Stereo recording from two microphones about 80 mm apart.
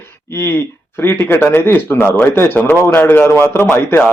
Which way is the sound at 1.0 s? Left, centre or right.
Left.